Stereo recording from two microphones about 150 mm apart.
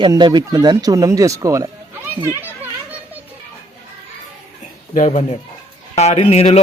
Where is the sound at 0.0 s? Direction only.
30° right (ahead or behind).